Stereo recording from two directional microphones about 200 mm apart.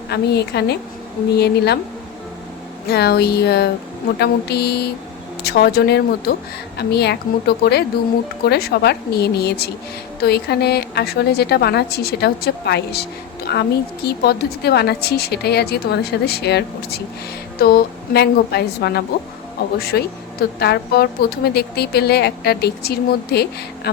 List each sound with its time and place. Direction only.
0.1 s speech: 55° left (ahead or behind)
2.8 s a woman's voice: 55° left (ahead or behind)